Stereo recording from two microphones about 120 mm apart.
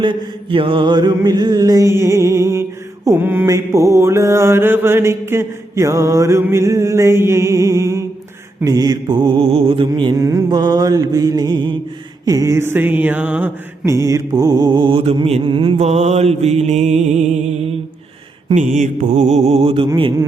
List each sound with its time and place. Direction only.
0.0 s mantra: 45° right (ahead or behind)
9.5 s music: 50° right (ahead or behind)
10.2 s mantra: 25° right (ahead or behind)
13.8 s mantra: 25° right (ahead or behind); by 15.8 s 45° right (ahead or behind)
15.8 s mantra: 70° right (ahead or behind)
18.5 s music: 90° right; by 19.9 s 50° right (ahead or behind)